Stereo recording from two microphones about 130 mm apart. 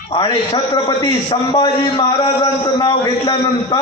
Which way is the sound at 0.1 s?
35° left (ahead or behind).